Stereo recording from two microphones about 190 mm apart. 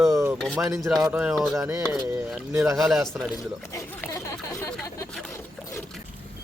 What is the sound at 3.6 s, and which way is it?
Speech, 15° left (ahead or behind).